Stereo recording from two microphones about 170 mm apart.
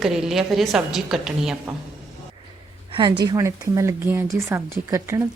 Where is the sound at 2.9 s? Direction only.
25° right (ahead or behind).